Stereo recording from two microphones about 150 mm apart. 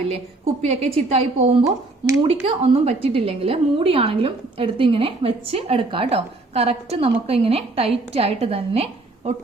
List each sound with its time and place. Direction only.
0.7 s a woman's voice: 45° right (ahead or behind)